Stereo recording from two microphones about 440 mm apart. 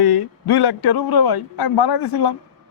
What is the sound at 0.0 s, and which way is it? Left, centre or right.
A man's voice, left.